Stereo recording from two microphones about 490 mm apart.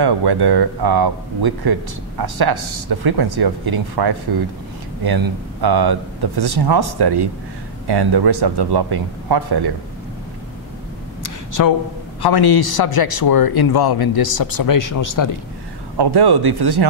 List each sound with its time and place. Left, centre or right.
0.0 s speech: right
11.2 s a sound: left
12.2 s speech: left
16.0 s speech: right